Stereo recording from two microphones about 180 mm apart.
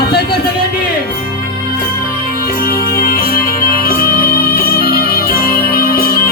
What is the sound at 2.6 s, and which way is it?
Music, 60° left (ahead or behind).